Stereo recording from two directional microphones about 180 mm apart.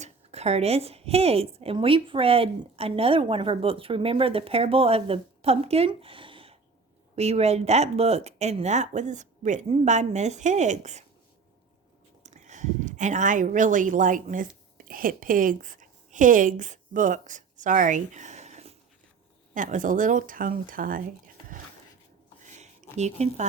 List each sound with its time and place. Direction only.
0.0 s a woman's voice: 35° right (ahead or behind)
12.2 s speech: 40° right (ahead or behind)
22.4 s a sound: 40° right (ahead or behind)